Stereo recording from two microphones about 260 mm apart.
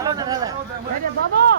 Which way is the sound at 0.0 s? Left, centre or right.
Centre.